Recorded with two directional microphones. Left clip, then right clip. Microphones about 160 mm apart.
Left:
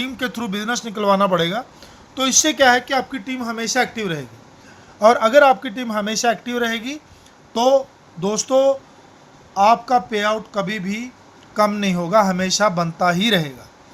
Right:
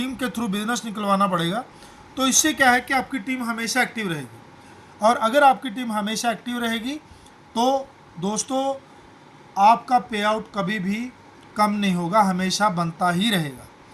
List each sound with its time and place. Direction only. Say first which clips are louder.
0.0 s speech: left 3 dB; 55° left (ahead or behind)